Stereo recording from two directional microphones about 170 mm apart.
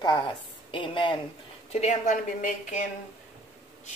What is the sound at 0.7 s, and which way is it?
Speech, 30° left (ahead or behind).